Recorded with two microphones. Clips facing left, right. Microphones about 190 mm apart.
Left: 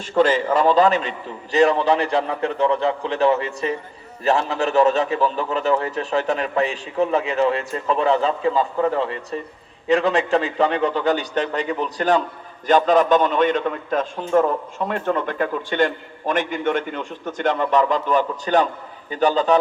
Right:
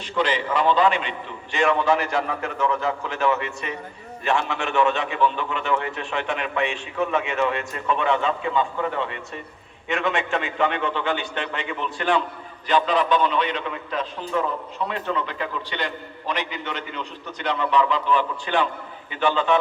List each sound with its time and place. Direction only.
0.0 s a man's voice: 45° left (ahead or behind)